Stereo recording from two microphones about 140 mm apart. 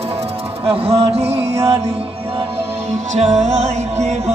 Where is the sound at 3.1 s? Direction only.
55° right (ahead or behind).